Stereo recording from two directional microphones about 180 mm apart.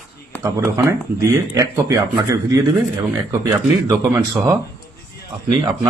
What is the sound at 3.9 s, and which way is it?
Speech, 20° right (ahead or behind).